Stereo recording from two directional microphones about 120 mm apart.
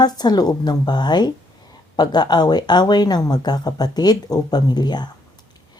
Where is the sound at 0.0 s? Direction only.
35° left (ahead or behind).